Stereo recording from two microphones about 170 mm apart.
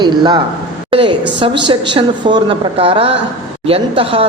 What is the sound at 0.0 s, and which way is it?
A man's voice, 25° right (ahead or behind).